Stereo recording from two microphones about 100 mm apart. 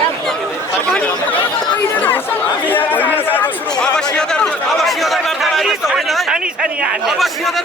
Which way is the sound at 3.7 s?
5° left (ahead or behind).